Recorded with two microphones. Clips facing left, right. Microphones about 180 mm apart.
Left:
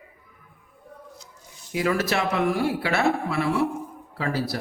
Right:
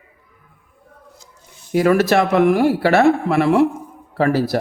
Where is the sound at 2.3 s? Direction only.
75° right (ahead or behind).